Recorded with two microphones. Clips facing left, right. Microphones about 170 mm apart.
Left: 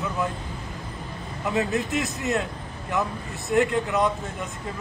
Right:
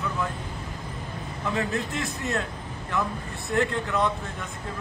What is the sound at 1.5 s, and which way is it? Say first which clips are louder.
Speech: left 4 dB; 20° left (ahead or behind).